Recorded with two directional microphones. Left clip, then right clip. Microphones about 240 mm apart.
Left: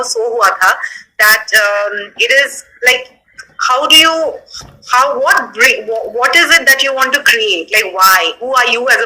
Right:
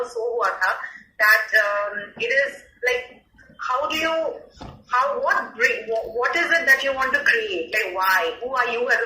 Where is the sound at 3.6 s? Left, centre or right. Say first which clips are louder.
Left 15 dB; left.